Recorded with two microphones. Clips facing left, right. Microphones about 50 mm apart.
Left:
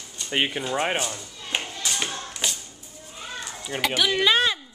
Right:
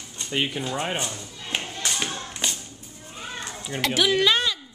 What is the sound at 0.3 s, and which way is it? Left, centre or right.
Speech, left.